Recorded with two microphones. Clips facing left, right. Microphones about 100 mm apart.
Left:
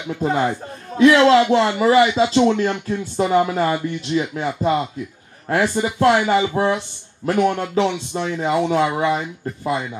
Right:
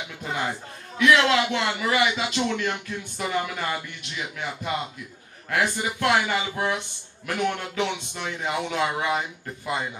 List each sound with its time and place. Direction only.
0.2 s speech: 35° left (ahead or behind)
5.5 s speech: 30° left (ahead or behind)